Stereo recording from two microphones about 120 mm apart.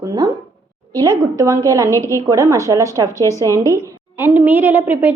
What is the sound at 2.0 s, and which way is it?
Speech, 25° left (ahead or behind).